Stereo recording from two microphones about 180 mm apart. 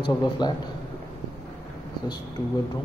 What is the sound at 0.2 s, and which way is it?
Speech, 25° left (ahead or behind).